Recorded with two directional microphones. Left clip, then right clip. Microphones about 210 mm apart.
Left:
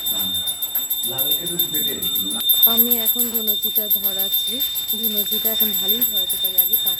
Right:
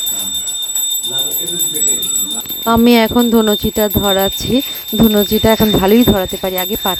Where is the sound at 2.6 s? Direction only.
50° right (ahead or behind).